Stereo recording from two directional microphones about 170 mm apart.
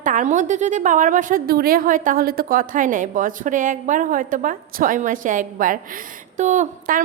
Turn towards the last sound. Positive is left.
turn(degrees=-50)  # may be behind; listen again after turning